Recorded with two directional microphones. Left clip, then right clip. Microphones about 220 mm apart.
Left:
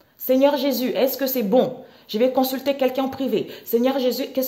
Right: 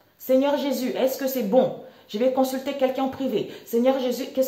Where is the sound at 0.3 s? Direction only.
45° left (ahead or behind).